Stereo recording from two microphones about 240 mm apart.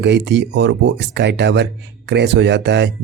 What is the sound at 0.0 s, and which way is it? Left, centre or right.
Speech, right.